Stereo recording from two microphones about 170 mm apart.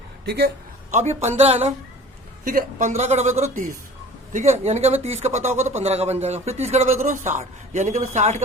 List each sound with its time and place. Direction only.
0.3 s a man's voice: 70° right (ahead or behind)
0.9 s speech: 40° right (ahead or behind)
2.4 s a woman's voice: 55° right (ahead or behind)
2.9 s speech: 40° right (ahead or behind)